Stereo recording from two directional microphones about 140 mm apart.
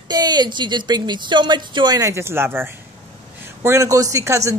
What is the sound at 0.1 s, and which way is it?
Speech, 30° right (ahead or behind).